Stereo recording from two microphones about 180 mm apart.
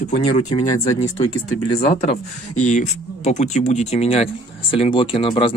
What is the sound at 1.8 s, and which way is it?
Speech, 35° left (ahead or behind).